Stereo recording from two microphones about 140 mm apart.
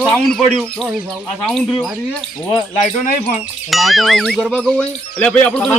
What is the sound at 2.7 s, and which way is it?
Speech, 60° left (ahead or behind).